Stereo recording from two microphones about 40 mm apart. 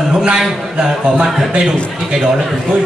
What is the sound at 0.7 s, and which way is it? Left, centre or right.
A man's voice, right.